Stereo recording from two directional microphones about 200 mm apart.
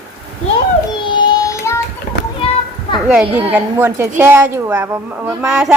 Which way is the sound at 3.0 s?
5° right (ahead or behind).